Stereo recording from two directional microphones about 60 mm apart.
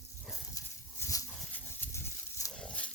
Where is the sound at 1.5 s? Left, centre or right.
Left.